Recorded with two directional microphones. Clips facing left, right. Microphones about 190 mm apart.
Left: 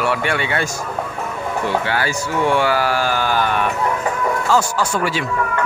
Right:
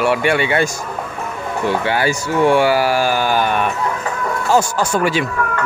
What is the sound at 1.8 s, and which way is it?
Speech, 15° right (ahead or behind).